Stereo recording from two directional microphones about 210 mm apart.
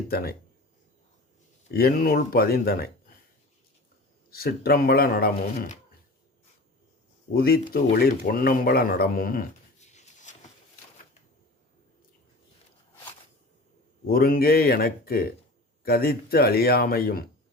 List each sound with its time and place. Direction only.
1.7 s speech: 45° left (ahead or behind)
4.3 s speech: 45° left (ahead or behind)
7.3 s speech: 45° left (ahead or behind)
14.1 s speech: 45° left (ahead or behind)